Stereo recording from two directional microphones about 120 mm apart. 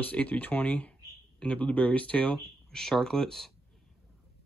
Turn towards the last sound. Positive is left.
turn(degrees=5)  # may be behind; listen again after turning